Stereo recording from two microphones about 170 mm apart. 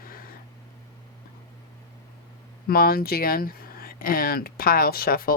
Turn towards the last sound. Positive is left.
turn(degrees=60)  # may be behind; listen again after turning